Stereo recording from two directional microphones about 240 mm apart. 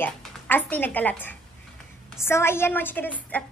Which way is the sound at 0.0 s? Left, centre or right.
Centre.